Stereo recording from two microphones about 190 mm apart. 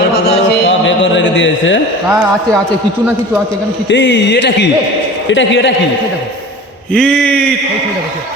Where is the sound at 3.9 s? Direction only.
70° left (ahead or behind).